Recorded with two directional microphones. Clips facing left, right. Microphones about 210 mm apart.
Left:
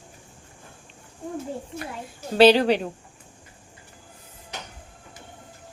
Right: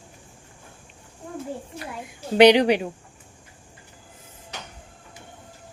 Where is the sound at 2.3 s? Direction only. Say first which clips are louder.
Right 1 dB; 15° right (ahead or behind).